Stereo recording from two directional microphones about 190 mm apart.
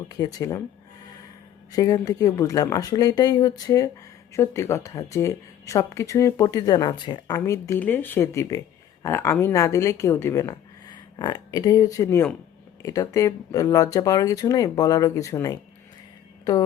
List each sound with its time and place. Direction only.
0.1 s speech: 20° left (ahead or behind)
1.7 s speech: 20° left (ahead or behind)